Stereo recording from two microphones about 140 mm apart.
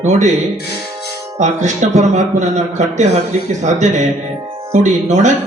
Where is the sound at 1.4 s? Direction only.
55° right (ahead or behind).